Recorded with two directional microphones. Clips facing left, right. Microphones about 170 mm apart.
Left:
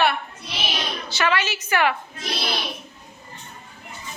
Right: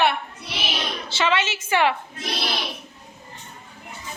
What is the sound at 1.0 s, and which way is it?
Speech, 25° right (ahead or behind).